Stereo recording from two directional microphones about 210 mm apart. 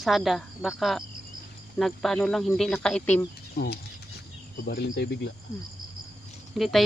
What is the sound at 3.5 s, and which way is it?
Speech, 50° left (ahead or behind).